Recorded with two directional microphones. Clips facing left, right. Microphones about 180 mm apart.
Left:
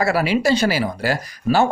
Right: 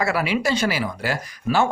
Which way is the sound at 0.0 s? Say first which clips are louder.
Left 4 dB; 35° left (ahead or behind).